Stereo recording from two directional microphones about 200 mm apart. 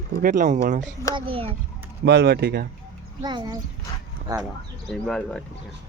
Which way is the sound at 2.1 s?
55° right (ahead or behind).